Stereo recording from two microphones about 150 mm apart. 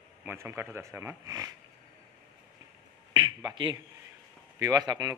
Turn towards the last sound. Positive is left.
turn(degrees=-25)  # may be behind; listen again after turning